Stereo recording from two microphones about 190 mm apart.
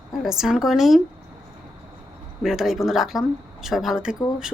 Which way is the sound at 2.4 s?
Centre (ahead or behind).